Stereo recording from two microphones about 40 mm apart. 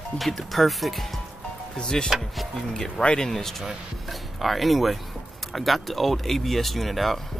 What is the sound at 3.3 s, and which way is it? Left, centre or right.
Speech, centre.